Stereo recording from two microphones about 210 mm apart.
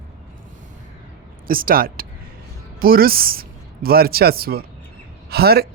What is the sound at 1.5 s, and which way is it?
Speech, 45° right (ahead or behind).